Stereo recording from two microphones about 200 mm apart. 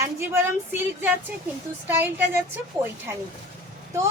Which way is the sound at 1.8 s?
10° right (ahead or behind).